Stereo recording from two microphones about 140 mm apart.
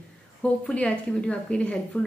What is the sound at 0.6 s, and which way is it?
A woman's voice, 10° left (ahead or behind).